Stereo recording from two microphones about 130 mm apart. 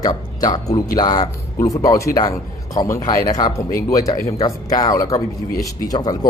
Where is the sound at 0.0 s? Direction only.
30° left (ahead or behind).